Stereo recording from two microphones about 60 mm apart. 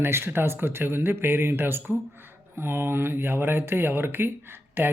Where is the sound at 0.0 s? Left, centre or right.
Right.